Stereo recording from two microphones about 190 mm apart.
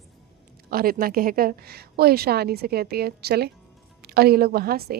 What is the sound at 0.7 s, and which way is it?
A woman's voice, 50° right (ahead or behind).